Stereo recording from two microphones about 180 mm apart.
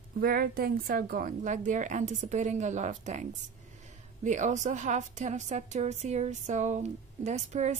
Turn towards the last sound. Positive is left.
turn(degrees=-40)  # may be behind; listen again after turning